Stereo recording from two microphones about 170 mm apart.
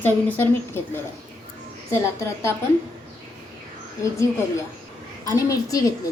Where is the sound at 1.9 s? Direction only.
15° left (ahead or behind).